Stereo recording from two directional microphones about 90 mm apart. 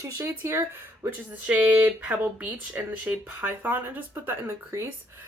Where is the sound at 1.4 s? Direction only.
15° right (ahead or behind).